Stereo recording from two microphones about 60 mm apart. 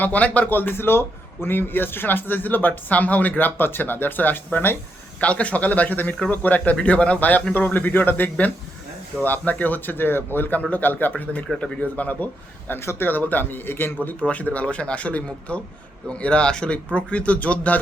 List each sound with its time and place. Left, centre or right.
0.0 s a man's voice: left
5.2 s a man's voice: left
12.8 s speech: left
13.1 s speech: left